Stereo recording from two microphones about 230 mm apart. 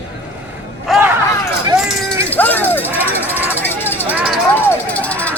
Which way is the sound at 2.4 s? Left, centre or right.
Centre.